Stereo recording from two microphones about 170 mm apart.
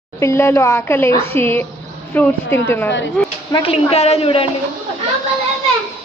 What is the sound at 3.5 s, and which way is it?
Speech, 35° left (ahead or behind).